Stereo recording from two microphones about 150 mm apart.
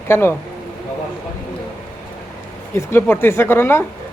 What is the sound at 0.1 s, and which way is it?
Speech, 15° left (ahead or behind).